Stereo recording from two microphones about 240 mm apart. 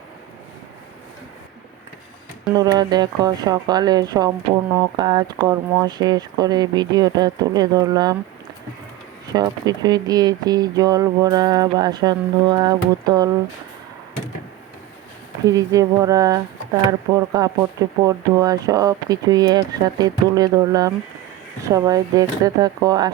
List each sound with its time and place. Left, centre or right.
2.6 s speech: centre
9.2 s speech: centre
15.4 s speech: centre